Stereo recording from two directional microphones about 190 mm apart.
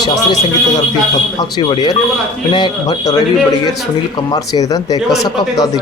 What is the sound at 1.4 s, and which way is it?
Speech, 25° left (ahead or behind).